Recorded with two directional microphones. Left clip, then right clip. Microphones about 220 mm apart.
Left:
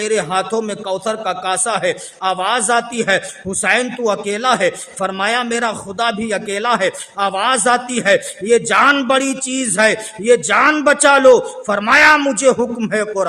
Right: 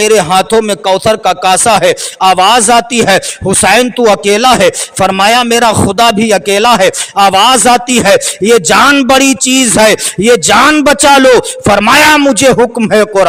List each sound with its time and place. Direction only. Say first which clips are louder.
0.0 s speech: right 10 dB; 45° right (ahead or behind)